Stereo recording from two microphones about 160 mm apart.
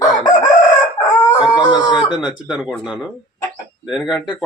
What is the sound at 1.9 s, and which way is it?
Speech, 30° left (ahead or behind).